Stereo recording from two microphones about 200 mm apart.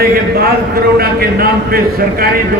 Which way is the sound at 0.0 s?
50° right (ahead or behind).